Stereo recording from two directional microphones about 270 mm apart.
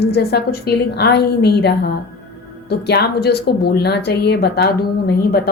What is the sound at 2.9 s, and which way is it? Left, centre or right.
Speech, left.